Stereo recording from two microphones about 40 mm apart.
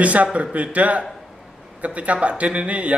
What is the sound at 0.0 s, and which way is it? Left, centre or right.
A man's voice, right.